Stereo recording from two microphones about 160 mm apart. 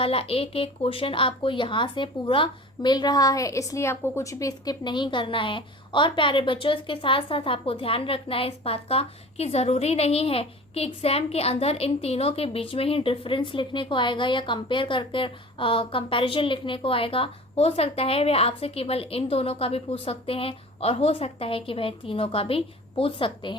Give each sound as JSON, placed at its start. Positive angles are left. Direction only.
{"t": 0.0, "sound": "a woman's voice", "side_deg": 35}